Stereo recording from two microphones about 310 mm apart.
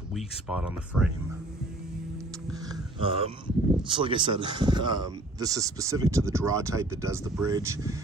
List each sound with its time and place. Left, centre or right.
0.1 s speech: centre
2.7 s speech: centre